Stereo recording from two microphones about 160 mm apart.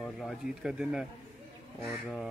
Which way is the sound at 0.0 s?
Centre (ahead or behind).